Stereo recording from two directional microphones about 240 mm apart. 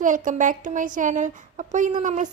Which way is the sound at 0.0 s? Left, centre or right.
Right.